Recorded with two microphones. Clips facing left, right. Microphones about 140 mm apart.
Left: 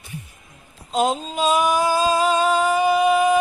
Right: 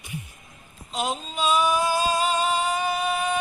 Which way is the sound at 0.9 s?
45° left (ahead or behind).